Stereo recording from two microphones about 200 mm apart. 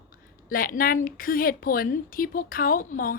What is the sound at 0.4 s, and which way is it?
A woman's voice, 45° left (ahead or behind).